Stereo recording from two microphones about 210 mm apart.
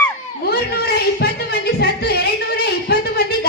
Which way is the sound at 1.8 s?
50° left (ahead or behind).